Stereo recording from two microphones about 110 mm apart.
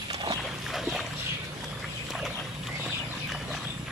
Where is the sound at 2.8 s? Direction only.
5° right (ahead or behind).